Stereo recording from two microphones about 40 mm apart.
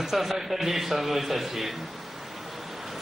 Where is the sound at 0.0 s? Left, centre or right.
Centre.